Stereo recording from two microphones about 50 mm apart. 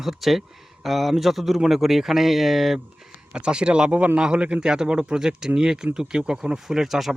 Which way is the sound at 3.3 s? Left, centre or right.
Centre.